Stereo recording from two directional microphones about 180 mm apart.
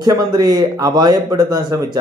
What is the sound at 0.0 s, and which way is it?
A man's voice, 20° right (ahead or behind).